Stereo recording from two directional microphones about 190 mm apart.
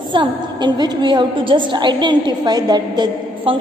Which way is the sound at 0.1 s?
25° right (ahead or behind).